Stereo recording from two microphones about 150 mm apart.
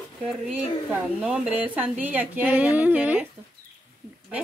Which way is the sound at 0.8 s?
5° right (ahead or behind).